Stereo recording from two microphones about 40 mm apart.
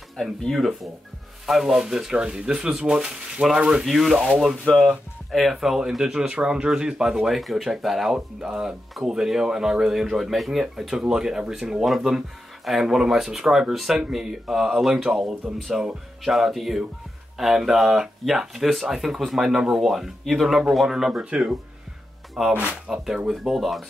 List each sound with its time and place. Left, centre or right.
0.2 s speech: centre
1.7 s speech: right
3.8 s speech: centre
4.7 s speech: centre
7.2 s speech: centre
21.2 s speech: right
22.5 s speech: right
22.8 s speech: centre
23.3 s speech: centre